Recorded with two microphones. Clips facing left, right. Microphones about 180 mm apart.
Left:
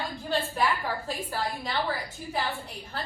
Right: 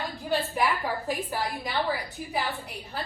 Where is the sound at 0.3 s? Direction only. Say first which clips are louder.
Right 1 dB; 15° right (ahead or behind).